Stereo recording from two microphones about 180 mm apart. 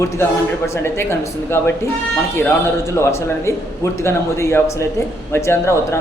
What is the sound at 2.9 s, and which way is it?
Speech, 15° left (ahead or behind).